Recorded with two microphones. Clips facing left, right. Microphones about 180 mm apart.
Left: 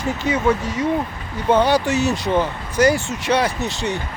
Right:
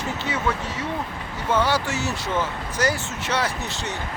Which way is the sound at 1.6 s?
15° left (ahead or behind).